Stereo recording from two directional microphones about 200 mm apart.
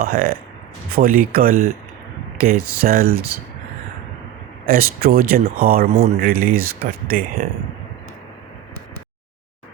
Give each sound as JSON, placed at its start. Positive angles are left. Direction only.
{"t": 0.0, "sound": "speech", "side_deg": -45}
{"t": 4.7, "sound": "speech", "side_deg": -45}